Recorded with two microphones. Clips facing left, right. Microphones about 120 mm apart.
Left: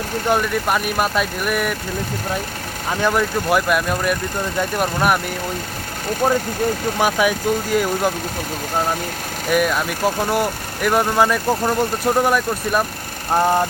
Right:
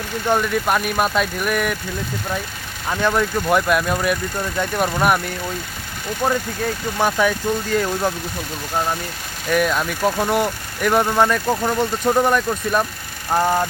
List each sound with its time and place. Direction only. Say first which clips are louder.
0.3 s speech: even; 5° left (ahead or behind)
2.9 s speech: even; 5° left (ahead or behind)
7.0 s speech: even; 10° left (ahead or behind)
9.5 s speech: even; 5° left (ahead or behind)